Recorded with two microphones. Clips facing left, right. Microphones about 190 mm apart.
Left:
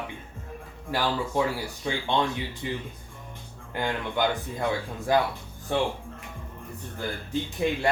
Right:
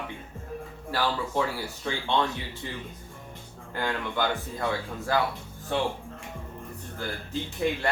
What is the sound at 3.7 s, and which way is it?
Speech, 15° left (ahead or behind).